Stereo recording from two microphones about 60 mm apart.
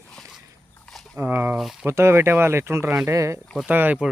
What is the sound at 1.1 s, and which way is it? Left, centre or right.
Speech, right.